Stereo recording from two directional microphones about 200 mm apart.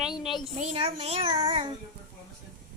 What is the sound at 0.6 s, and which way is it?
A child's voice, 30° right (ahead or behind).